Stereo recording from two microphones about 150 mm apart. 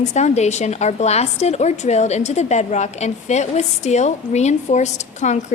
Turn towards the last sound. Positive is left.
turn(degrees=50)  # may be behind; listen again after turning